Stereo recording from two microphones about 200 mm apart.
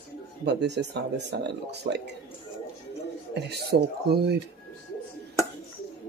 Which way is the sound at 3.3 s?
55° right (ahead or behind).